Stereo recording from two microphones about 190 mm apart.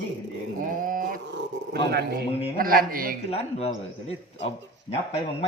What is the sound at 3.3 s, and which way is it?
A man's voice, 35° left (ahead or behind).